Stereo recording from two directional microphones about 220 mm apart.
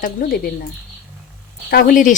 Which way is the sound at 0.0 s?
40° left (ahead or behind).